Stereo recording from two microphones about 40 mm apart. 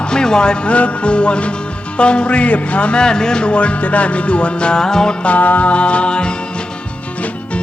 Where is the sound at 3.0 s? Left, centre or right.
Centre.